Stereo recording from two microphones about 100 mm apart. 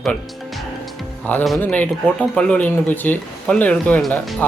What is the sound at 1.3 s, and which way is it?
Speech, 15° left (ahead or behind).